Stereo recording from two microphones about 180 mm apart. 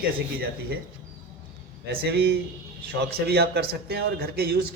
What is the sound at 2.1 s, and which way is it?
A man's voice, 65° right (ahead or behind).